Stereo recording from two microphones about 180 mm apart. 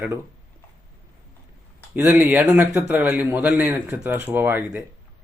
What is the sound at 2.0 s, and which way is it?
A man's voice, 10° right (ahead or behind).